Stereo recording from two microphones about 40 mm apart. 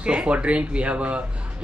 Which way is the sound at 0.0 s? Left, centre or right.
Right.